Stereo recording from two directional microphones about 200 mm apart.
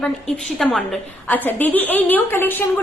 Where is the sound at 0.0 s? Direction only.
Centre (ahead or behind).